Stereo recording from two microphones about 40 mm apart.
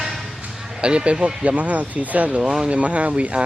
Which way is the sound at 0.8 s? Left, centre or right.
Right.